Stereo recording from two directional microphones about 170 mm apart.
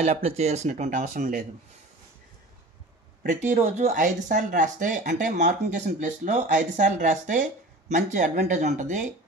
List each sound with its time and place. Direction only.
0.0 s speech: 40° right (ahead or behind); by 1.4 s 55° right (ahead or behind)
3.3 s speech: 45° right (ahead or behind)